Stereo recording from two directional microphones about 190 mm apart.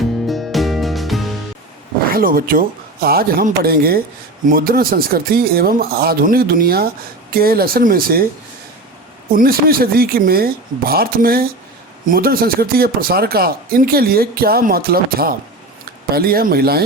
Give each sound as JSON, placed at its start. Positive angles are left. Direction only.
{"t": 0.3, "sound": "music", "side_deg": 0}
{"t": 2.1, "sound": "speech", "side_deg": -50}
{"t": 9.3, "sound": "speech", "side_deg": -50}